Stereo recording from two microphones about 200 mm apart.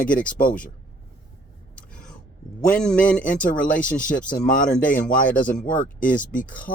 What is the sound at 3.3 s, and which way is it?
Speech, 40° left (ahead or behind).